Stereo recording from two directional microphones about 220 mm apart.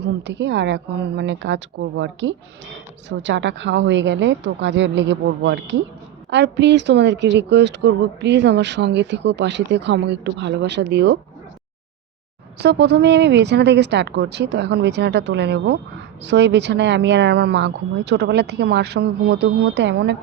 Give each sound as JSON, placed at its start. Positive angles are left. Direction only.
{"t": 0.0, "sound": "speech", "side_deg": -50}
{"t": 12.5, "sound": "speech", "side_deg": -50}